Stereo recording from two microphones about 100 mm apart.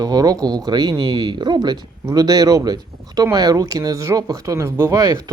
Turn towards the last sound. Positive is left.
turn(degrees=-35)  # may be behind; listen again after turning